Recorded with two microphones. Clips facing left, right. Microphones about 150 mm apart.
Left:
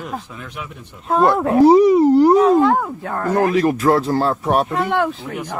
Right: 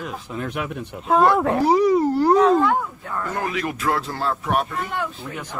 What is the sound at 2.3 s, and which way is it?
Speech, 5° left (ahead or behind).